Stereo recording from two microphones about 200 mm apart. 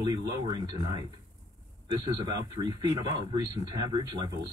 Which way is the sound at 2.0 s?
20° right (ahead or behind).